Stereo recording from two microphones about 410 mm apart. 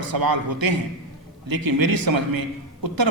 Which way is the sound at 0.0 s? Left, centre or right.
Right.